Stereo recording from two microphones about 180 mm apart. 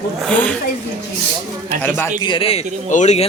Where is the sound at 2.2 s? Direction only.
30° left (ahead or behind).